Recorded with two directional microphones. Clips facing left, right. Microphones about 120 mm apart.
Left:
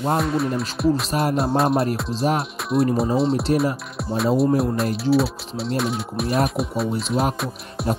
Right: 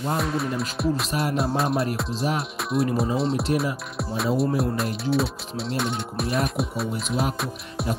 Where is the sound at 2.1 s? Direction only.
35° left (ahead or behind).